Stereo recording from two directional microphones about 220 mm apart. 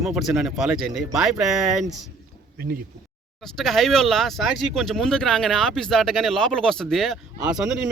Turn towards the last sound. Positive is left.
turn(degrees=-5)  # may be behind; listen again after turning